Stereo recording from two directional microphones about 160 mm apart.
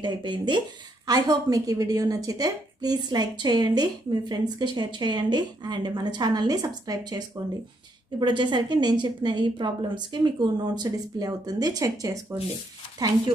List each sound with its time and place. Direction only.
0.0 s a woman's voice: 30° right (ahead or behind)